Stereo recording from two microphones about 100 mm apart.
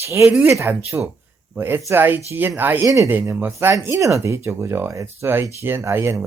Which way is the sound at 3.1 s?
20° right (ahead or behind).